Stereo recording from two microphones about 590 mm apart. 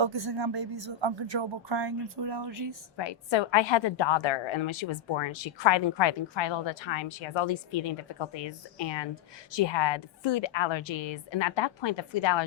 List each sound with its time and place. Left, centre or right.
0.0 s speech: right
3.0 s a woman's voice: left